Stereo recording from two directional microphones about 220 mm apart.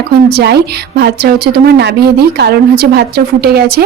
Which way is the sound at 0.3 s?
45° right (ahead or behind).